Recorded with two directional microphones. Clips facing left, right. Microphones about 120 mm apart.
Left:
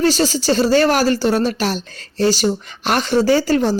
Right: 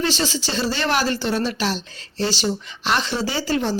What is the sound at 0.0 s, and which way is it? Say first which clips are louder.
Speech: left 7 dB; 40° left (ahead or behind).